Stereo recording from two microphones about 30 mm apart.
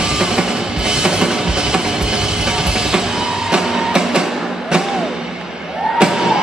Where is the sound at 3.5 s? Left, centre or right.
Right.